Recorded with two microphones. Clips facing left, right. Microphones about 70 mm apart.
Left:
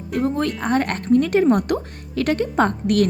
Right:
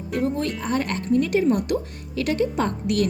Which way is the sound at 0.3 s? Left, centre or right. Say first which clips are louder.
Left 4 dB; left.